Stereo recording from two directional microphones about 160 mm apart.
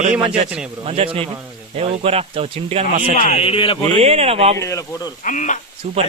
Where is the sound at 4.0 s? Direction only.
40° right (ahead or behind).